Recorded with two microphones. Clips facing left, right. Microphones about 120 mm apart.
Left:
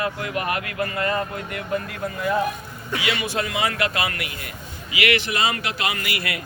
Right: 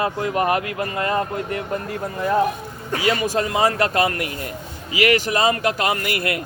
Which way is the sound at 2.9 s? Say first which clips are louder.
Right 5 dB; 40° right (ahead or behind).